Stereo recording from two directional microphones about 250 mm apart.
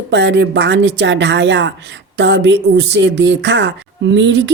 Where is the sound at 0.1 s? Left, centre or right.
Right.